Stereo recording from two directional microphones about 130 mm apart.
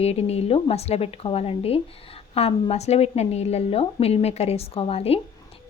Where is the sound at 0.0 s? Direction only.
55° left (ahead or behind).